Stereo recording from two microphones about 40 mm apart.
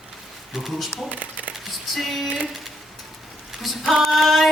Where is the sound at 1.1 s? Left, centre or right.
Right.